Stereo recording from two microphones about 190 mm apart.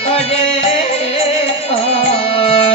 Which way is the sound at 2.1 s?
30° left (ahead or behind).